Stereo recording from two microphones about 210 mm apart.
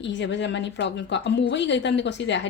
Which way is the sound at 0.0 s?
60° left (ahead or behind).